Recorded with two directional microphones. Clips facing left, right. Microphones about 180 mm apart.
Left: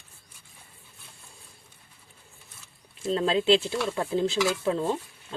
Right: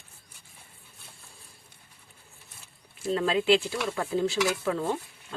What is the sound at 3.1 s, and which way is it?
Speech, 30° left (ahead or behind).